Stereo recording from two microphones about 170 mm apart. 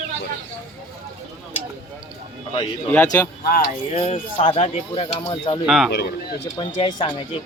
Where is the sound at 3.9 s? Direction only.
35° left (ahead or behind).